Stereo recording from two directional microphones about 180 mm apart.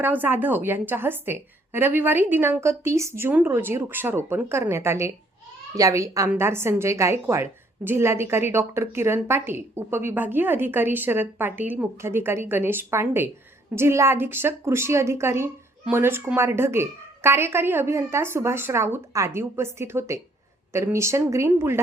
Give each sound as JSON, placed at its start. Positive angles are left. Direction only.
{"t": 0.0, "sound": "a woman's voice", "side_deg": -10}